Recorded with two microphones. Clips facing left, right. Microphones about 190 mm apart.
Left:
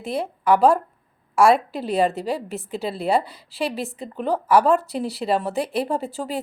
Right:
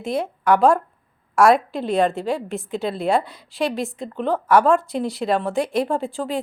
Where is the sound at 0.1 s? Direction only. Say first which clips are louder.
Right 1 dB; centre (ahead or behind).